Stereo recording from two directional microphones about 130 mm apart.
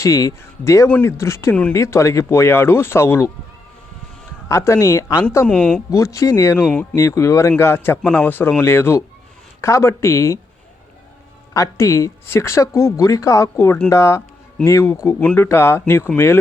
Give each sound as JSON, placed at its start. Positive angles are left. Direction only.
{"t": 0.0, "sound": "speech", "side_deg": 25}
{"t": 4.4, "sound": "speech", "side_deg": 20}
{"t": 5.5, "sound": "speech", "side_deg": 5}
{"t": 5.9, "sound": "speech", "side_deg": 25}
{"t": 6.6, "sound": "speech", "side_deg": 10}
{"t": 6.9, "sound": "speech", "side_deg": 20}
{"t": 11.5, "sound": "speech", "side_deg": 25}